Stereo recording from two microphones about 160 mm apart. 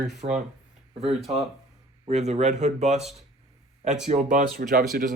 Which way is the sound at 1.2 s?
Centre (ahead or behind).